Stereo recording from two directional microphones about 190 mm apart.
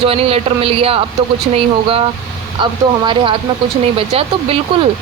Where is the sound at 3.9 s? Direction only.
30° right (ahead or behind).